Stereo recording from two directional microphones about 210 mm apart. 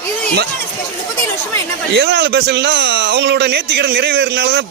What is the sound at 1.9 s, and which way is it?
Speech, 55° right (ahead or behind).